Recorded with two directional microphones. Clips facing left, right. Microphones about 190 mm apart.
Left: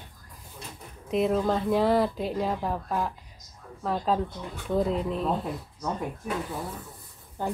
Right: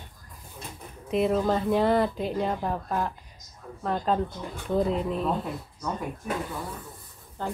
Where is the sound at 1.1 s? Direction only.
Centre (ahead or behind).